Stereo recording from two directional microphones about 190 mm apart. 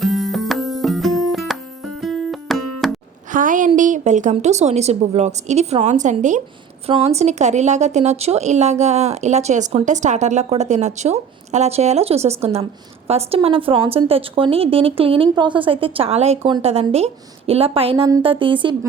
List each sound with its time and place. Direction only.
0.0 s music: centre (ahead or behind)
3.3 s a woman's voice: 45° right (ahead or behind); by 18.8 s 25° right (ahead or behind)